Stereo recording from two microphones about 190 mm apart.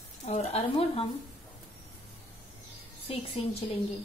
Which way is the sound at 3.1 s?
30° left (ahead or behind).